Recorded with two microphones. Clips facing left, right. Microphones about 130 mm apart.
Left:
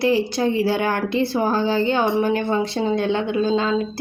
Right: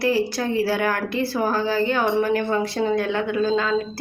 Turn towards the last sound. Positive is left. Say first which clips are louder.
# left 1 dB
turn(degrees=25)  # may be behind; listen again after turning